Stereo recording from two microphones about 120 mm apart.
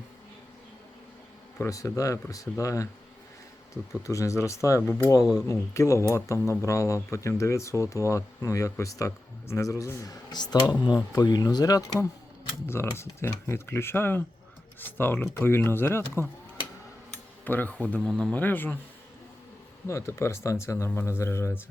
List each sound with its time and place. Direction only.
1.5 s speech: 25° left (ahead or behind)
4.0 s speech: 25° left (ahead or behind)
17.4 s speech: 15° left (ahead or behind)
19.9 s speech: 25° left (ahead or behind)